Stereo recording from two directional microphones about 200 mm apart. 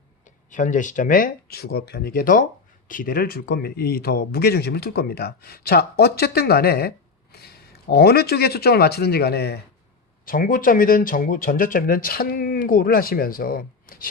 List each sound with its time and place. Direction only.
0.5 s speech: 40° left (ahead or behind)